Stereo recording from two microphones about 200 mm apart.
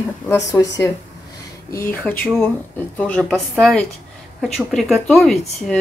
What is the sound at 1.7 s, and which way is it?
Speech, 15° left (ahead or behind).